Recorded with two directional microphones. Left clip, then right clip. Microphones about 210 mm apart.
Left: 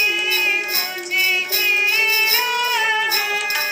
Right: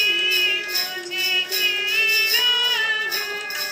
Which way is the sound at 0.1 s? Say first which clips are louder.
Left 1 dB; 35° left (ahead or behind).